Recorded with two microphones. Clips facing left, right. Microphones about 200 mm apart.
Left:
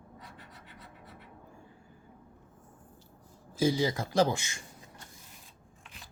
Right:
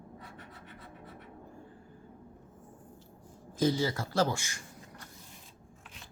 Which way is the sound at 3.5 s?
10° left (ahead or behind).